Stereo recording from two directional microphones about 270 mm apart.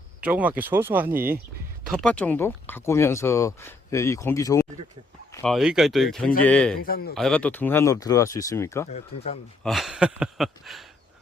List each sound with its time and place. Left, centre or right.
0.2 s speech: centre
6.8 s a man's voice: left
7.2 s speech: centre
8.9 s speech: left
9.6 s speech: centre